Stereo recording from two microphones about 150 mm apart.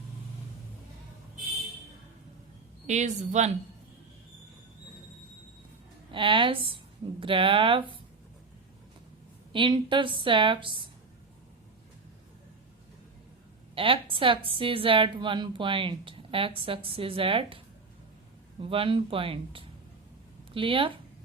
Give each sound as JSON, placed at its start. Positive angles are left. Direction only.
{"t": 2.8, "sound": "a woman's voice", "side_deg": -50}
{"t": 6.1, "sound": "a woman's voice", "side_deg": -35}
{"t": 9.5, "sound": "a woman's voice", "side_deg": -35}
{"t": 13.7, "sound": "a woman's voice", "side_deg": -35}
{"t": 18.6, "sound": "a woman's voice", "side_deg": -35}